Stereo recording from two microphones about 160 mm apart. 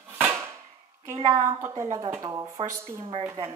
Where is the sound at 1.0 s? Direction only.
20° right (ahead or behind).